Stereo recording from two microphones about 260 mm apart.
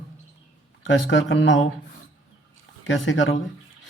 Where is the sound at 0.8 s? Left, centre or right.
Left.